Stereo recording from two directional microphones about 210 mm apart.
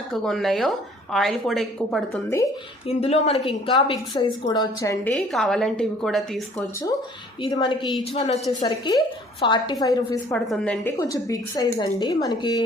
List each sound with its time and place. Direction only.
0.1 s a woman's voice: centre (ahead or behind)
2.8 s a woman's voice: 30° left (ahead or behind)
5.1 s a woman's voice: centre (ahead or behind)
7.4 s a woman's voice: 20° left (ahead or behind)